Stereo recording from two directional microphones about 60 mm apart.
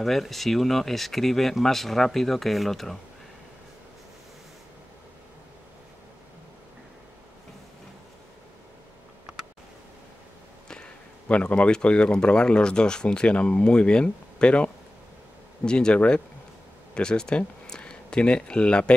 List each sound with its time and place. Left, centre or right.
0.0 s speech: centre
10.7 s speech: left